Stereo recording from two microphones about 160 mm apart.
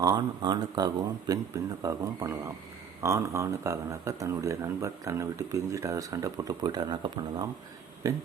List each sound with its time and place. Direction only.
0.0 s speech: 25° right (ahead or behind)